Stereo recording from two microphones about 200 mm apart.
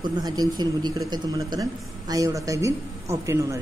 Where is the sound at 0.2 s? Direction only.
20° right (ahead or behind).